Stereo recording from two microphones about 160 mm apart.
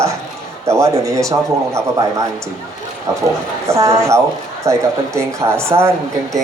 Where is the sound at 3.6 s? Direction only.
20° right (ahead or behind).